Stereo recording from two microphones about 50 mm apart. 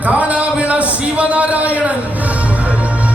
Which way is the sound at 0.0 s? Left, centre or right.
Right.